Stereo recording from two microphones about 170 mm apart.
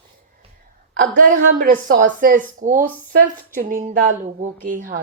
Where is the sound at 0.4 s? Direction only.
35° right (ahead or behind).